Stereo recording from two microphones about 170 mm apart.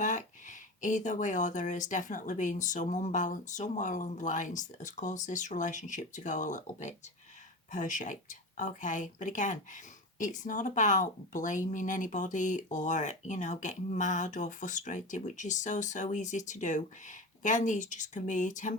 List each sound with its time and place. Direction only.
0.0 s a woman's voice: 45° left (ahead or behind)